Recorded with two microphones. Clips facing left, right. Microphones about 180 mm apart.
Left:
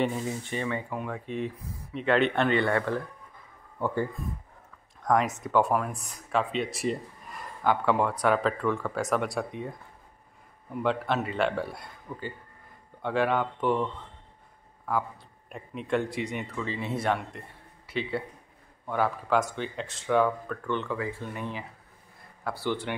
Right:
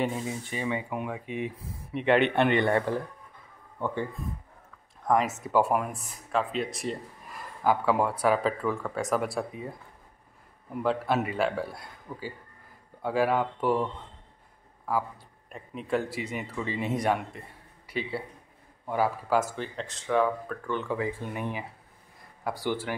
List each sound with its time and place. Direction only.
0.0 s speech: 5° right (ahead or behind)
0.7 s speech: 15° right (ahead or behind)
5.0 s speech: 5° right (ahead or behind)
15.5 s speech: centre (ahead or behind)
18.9 s speech: 5° right (ahead or behind)
20.9 s speech: 15° right (ahead or behind)